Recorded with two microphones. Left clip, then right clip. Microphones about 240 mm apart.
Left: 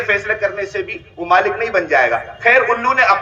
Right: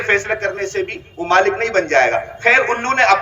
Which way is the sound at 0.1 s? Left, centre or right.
Centre.